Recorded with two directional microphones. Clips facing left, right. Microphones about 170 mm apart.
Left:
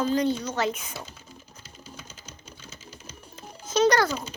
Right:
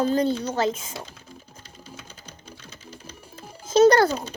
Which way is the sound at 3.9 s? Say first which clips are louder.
Right 5 dB; 30° right (ahead or behind).